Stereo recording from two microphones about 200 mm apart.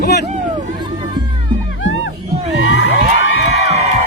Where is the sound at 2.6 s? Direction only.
75° left (ahead or behind).